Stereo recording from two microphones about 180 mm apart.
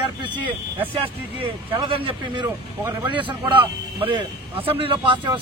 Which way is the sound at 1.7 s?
30° right (ahead or behind).